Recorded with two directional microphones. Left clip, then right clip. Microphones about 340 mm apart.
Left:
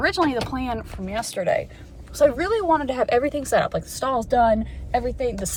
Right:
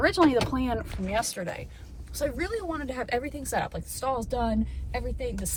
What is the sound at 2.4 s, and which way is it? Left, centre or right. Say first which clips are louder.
Speech: left 12 dB; left.